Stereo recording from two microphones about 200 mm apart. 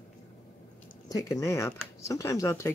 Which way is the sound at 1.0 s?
15° left (ahead or behind).